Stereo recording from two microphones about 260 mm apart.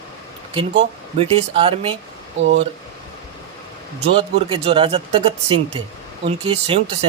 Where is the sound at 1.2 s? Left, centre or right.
Right.